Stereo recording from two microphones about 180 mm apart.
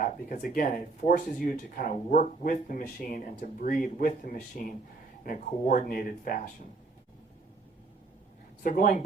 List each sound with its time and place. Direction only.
0.0 s speech: 45° left (ahead or behind)
8.6 s speech: 45° left (ahead or behind)